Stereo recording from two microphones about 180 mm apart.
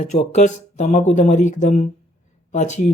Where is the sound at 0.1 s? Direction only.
40° left (ahead or behind).